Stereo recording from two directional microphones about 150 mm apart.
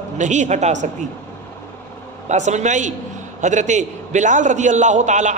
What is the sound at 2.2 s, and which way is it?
A man's voice, 50° right (ahead or behind).